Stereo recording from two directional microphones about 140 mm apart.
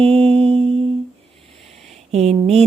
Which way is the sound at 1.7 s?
50° right (ahead or behind).